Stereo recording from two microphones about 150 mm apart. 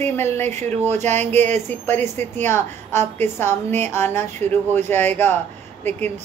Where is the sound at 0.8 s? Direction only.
50° right (ahead or behind).